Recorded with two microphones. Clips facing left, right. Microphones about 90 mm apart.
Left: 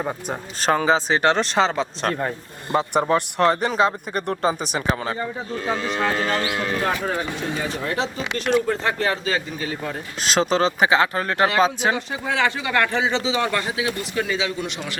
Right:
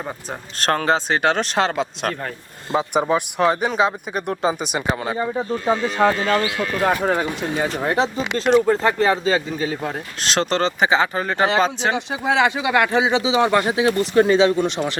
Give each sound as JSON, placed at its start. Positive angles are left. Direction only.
{"t": 0.6, "sound": "speech", "side_deg": 5}
{"t": 5.6, "sound": "speech", "side_deg": -40}
{"t": 10.2, "sound": "speech", "side_deg": 5}
{"t": 12.2, "sound": "speech", "side_deg": -20}